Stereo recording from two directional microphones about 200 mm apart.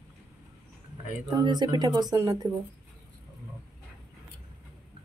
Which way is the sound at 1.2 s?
20° right (ahead or behind).